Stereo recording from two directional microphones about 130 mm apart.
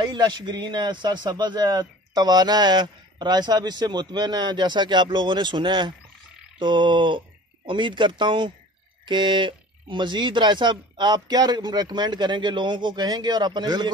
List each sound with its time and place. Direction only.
0.1 s speech: 35° right (ahead or behind)